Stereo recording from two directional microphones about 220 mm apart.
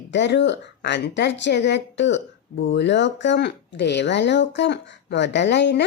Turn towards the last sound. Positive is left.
turn(degrees=50)  # may be behind; listen again after turning